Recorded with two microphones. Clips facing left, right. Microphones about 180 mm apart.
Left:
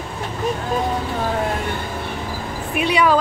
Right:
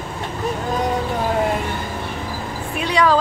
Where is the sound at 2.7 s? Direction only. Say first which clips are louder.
Left 1 dB; 15° left (ahead or behind).